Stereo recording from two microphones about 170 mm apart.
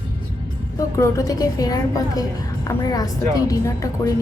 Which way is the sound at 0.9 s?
20° left (ahead or behind).